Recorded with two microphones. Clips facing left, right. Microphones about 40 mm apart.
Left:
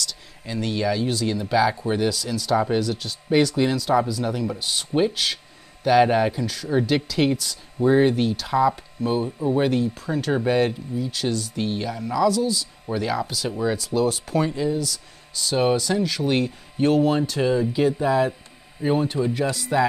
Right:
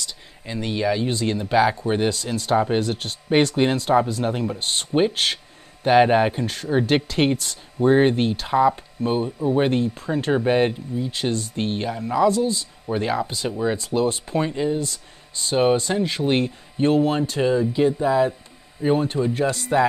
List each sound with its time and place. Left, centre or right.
0.5 s speech: centre
8.5 s speech: right
13.5 s speech: centre
13.7 s speech: right
17.4 s speech: centre
17.9 s speech: centre
18.8 s speech: centre